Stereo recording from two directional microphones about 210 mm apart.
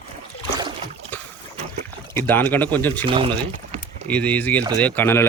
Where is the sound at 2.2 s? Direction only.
10° left (ahead or behind).